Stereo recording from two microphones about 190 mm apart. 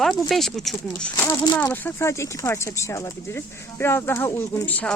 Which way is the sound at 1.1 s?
15° left (ahead or behind).